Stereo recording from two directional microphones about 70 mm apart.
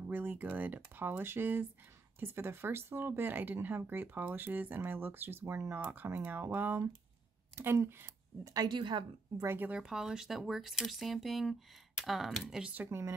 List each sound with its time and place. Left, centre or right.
0.1 s speech: right
8.5 s a woman's voice: right
9.7 s speech: centre